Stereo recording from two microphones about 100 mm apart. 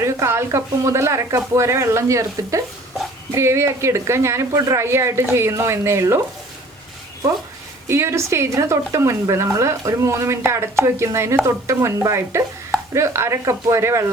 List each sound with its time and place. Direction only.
0.0 s speech: 30° right (ahead or behind)
7.9 s speech: 25° right (ahead or behind)